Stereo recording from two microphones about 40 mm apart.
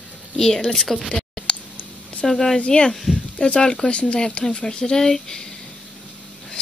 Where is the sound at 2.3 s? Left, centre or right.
Centre.